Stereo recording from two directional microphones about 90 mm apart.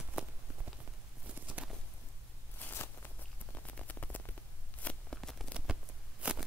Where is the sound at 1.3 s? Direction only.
15° right (ahead or behind).